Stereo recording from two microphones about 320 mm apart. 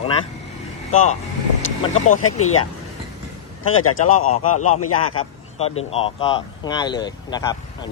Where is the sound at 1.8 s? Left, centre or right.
Left.